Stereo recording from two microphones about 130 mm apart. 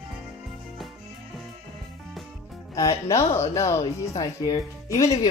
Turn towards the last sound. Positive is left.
turn(degrees=25)  # may be behind; listen again after turning